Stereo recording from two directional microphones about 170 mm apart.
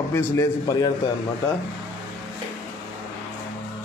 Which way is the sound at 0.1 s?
20° left (ahead or behind).